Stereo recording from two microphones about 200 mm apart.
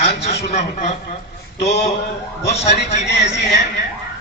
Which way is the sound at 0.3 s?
35° left (ahead or behind).